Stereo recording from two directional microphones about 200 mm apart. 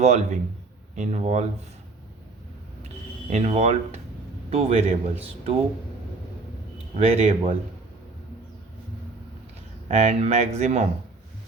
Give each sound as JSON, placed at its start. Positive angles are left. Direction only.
{"t": 0.0, "sound": "speech", "side_deg": -35}
{"t": 3.2, "sound": "speech", "side_deg": -35}
{"t": 6.9, "sound": "speech", "side_deg": -30}
{"t": 9.9, "sound": "speech", "side_deg": -35}